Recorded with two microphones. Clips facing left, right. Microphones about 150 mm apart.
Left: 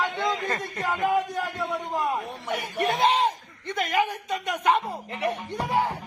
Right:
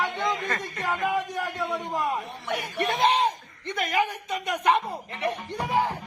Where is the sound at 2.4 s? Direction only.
5° left (ahead or behind).